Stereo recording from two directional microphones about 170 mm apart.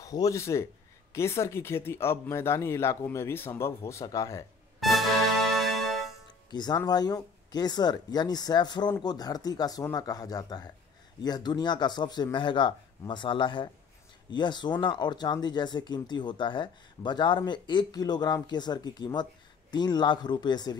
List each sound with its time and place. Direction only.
0.0 s speech: 20° left (ahead or behind)
4.7 s music: centre (ahead or behind)
6.5 s speech: 25° left (ahead or behind)